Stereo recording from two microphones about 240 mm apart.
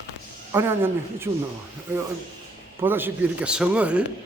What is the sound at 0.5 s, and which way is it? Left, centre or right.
Speech, centre.